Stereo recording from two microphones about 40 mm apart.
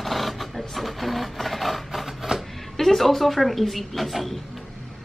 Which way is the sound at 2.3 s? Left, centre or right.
Centre.